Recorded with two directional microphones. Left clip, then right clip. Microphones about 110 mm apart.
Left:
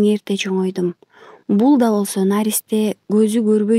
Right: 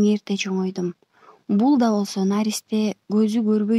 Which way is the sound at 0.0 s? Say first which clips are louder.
Left 5 dB; 40° left (ahead or behind).